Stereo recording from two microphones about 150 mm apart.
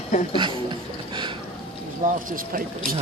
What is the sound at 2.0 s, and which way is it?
Speech, 65° right (ahead or behind).